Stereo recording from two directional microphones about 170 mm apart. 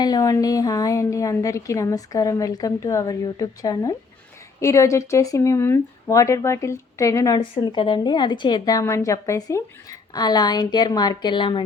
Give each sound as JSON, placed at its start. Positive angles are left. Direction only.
{"t": 0.0, "sound": "a woman's voice", "side_deg": 20}